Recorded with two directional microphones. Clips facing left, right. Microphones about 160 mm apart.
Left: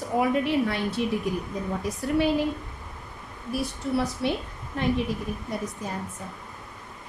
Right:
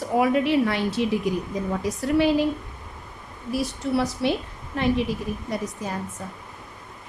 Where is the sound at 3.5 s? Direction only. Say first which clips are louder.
Right 3 dB; 90° right.